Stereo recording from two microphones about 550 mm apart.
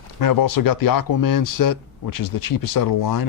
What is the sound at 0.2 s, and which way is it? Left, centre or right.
Speech, left.